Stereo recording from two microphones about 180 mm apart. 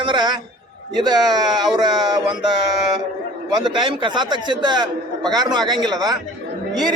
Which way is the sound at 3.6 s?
25° right (ahead or behind).